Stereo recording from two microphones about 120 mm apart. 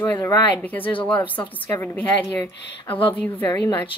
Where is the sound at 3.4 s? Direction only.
30° left (ahead or behind).